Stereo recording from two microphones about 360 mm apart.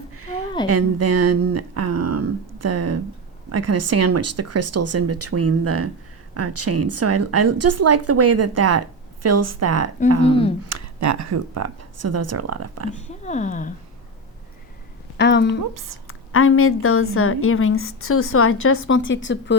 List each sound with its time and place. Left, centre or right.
0.7 s a woman's voice: right
10.2 s speech: centre
10.7 s speech: right
12.9 s speech: centre
15.2 s a woman's voice: left
15.7 s a woman's voice: right
16.0 s a woman's voice: left